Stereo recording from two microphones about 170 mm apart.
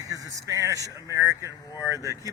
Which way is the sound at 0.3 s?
20° right (ahead or behind).